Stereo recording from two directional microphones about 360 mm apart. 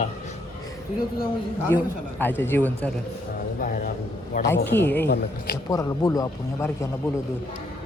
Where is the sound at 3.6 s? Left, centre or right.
Left.